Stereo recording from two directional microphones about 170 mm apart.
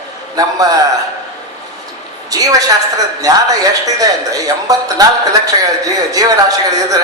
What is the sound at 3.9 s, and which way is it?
A man's voice, 20° right (ahead or behind).